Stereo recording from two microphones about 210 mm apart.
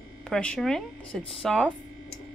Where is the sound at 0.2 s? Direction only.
5° left (ahead or behind).